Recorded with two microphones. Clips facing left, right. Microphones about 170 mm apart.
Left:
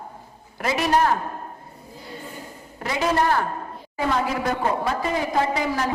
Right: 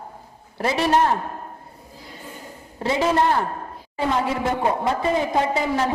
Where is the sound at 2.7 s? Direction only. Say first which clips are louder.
Right 2 dB; 25° right (ahead or behind).